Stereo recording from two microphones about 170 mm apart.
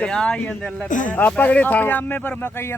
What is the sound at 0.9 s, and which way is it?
Speech, 50° left (ahead or behind).